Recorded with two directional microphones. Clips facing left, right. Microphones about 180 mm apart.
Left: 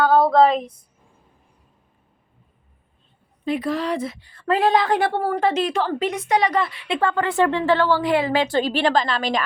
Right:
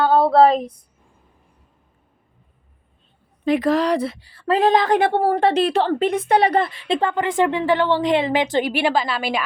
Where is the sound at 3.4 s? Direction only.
90° right.